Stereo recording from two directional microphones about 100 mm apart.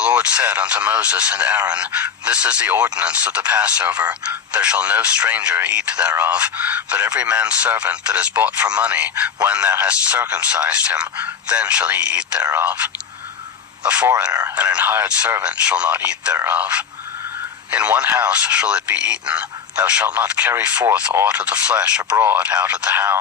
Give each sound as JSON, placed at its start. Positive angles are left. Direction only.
{"t": 0.0, "sound": "speech", "side_deg": -15}
{"t": 13.8, "sound": "speech", "side_deg": -15}